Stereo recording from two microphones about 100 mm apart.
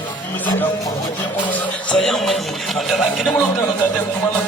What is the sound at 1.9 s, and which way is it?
A man's voice, 5° left (ahead or behind).